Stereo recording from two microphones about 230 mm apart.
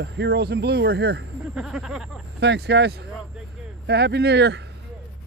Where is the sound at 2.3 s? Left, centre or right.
Right.